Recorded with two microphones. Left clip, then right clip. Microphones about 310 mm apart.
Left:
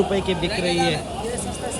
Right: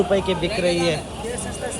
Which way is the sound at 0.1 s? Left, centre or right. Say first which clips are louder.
Right 2 dB; centre.